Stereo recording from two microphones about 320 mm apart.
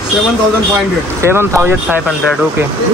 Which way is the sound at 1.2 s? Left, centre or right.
Centre.